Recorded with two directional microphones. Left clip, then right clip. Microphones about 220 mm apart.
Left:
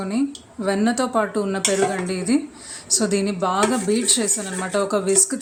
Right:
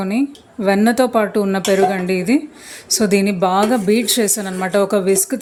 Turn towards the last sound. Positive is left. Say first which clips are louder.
# right 4 dB
turn(degrees=-25)  # may be behind; listen again after turning